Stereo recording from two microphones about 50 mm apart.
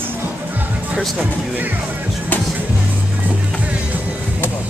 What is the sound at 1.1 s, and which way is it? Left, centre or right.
Speech, right.